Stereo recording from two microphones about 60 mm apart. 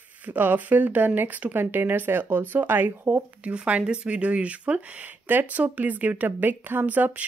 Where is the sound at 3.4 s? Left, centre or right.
Right.